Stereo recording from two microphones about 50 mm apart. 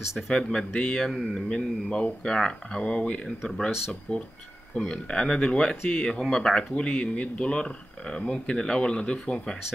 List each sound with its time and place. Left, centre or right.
0.3 s speech: centre
1.1 s speech: centre
1.5 s speech: centre